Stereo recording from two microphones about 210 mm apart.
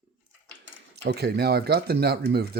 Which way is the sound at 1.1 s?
50° right (ahead or behind).